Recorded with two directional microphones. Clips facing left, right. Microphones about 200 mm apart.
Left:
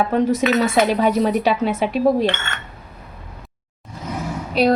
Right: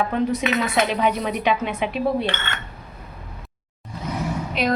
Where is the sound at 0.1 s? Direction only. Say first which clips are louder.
Left 5 dB; 45° left (ahead or behind).